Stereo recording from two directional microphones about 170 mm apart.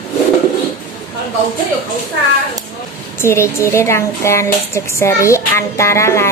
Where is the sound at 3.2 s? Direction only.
15° left (ahead or behind).